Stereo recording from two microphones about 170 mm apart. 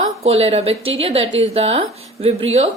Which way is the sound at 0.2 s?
35° right (ahead or behind).